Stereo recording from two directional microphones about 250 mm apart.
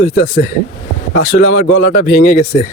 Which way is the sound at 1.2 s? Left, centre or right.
Left.